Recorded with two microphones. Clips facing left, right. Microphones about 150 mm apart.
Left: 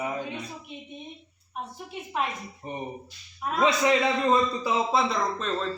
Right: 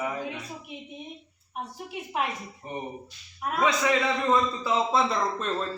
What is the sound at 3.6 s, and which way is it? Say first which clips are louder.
A man's voice: left 2 dB; 25° left (ahead or behind).